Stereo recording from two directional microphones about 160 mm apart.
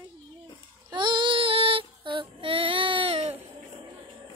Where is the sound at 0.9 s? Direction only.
30° right (ahead or behind).